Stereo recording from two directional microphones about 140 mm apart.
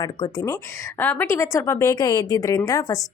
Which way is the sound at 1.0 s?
15° left (ahead or behind).